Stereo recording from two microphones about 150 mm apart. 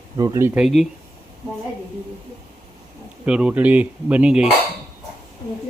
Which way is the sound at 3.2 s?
5° right (ahead or behind).